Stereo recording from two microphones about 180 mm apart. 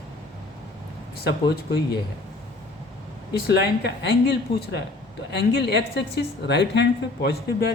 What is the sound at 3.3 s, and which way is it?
A woman's voice, 65° left (ahead or behind).